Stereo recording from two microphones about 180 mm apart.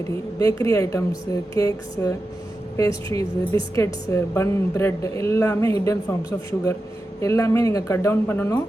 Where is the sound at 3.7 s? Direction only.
15° left (ahead or behind).